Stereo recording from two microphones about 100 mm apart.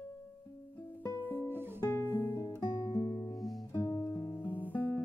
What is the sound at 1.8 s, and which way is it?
Music, 20° left (ahead or behind).